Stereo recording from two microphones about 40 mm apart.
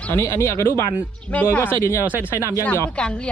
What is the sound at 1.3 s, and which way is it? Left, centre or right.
Speech, left.